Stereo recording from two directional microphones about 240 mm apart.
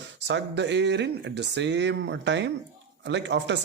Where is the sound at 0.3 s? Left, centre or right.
Right.